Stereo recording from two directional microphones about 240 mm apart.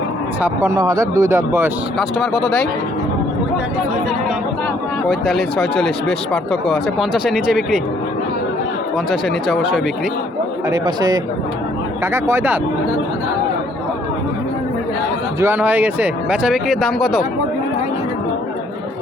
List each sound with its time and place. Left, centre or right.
0.4 s speech: centre
2.0 s speech: centre
5.0 s speech: centre
9.0 s speech: centre
10.7 s speech: centre
15.4 s speech: centre